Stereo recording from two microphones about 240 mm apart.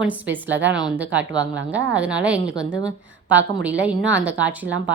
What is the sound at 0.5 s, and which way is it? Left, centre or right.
A woman's voice, right.